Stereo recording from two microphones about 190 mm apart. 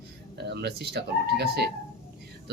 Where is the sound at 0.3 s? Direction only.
60° right (ahead or behind).